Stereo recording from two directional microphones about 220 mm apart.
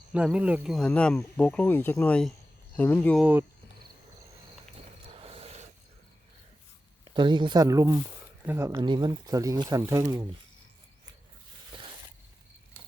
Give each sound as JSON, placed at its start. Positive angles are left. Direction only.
{"t": 0.1, "sound": "speech", "side_deg": -5}
{"t": 5.0, "sound": "a sound", "side_deg": -25}
{"t": 7.1, "sound": "speech", "side_deg": -20}